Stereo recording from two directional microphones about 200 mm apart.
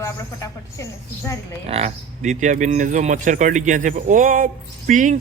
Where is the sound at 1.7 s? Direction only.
30° right (ahead or behind).